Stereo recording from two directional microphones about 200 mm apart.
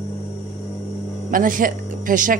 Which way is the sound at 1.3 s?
45° right (ahead or behind).